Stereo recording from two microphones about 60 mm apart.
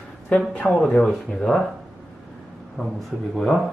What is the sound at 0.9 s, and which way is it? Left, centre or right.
Speech, centre.